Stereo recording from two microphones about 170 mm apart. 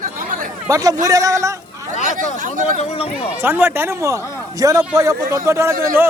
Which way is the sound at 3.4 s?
15° right (ahead or behind).